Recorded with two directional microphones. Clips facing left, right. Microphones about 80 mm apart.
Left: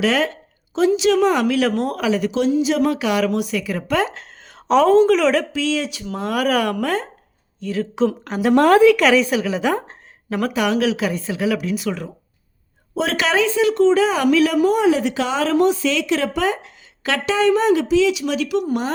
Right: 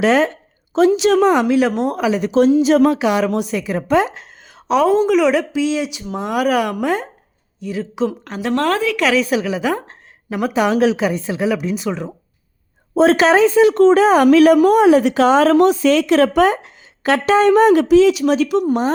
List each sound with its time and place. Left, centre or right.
0.0 s a sound: right
0.8 s speech: right
1.3 s a woman's voice: right
2.3 s a woman's voice: right
3.0 s a woman's voice: right
4.0 s a woman's voice: centre
7.9 s a woman's voice: centre
9.0 s a woman's voice: centre
10.2 s speech: centre
10.5 s a woman's voice: right
11.0 s a woman's voice: right
12.9 s speech: right